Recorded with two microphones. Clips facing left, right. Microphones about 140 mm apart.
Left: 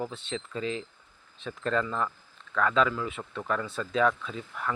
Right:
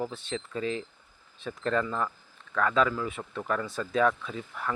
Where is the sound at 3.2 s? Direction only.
10° right (ahead or behind).